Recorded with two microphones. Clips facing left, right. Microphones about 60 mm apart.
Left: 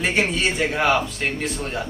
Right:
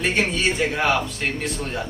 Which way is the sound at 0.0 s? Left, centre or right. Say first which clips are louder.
Even; centre.